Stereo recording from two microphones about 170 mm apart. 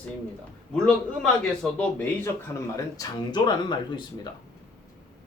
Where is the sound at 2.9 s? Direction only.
25° left (ahead or behind).